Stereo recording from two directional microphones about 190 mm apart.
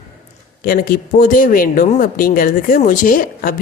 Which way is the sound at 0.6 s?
50° left (ahead or behind).